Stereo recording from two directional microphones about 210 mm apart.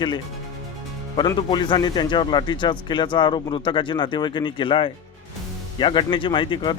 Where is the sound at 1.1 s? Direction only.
20° left (ahead or behind).